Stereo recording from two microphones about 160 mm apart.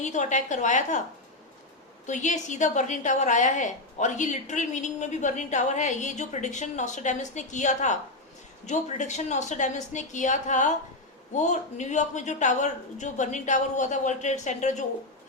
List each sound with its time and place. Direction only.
0.0 s a woman's voice: 50° left (ahead or behind)
2.0 s a woman's voice: 50° left (ahead or behind)